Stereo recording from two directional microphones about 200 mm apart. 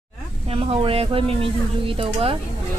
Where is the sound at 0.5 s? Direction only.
25° right (ahead or behind).